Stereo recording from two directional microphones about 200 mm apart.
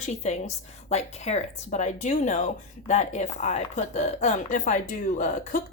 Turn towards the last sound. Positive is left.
turn(degrees=40)  # may be behind; listen again after turning